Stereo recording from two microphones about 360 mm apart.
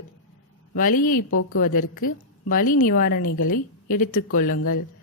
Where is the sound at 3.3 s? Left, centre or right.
Left.